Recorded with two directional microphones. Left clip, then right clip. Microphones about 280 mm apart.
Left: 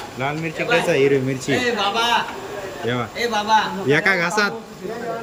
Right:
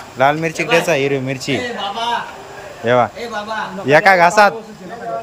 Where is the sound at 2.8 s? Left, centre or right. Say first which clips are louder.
Right 9 dB; centre.